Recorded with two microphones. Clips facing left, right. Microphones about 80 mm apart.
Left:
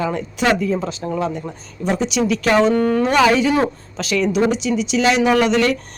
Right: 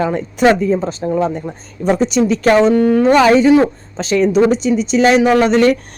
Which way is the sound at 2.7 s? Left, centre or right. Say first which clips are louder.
Right 5 dB; centre.